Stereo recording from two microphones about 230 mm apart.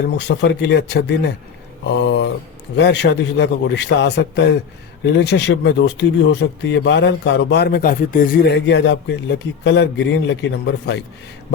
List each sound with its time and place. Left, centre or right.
0.2 s speech: left